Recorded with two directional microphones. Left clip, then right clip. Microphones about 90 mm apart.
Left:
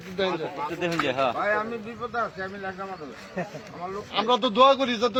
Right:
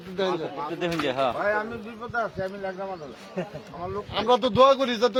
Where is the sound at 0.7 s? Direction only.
15° right (ahead or behind).